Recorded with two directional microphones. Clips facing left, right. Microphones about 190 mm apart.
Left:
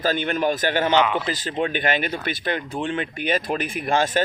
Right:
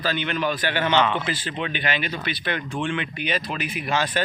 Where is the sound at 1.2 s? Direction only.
45° left (ahead or behind).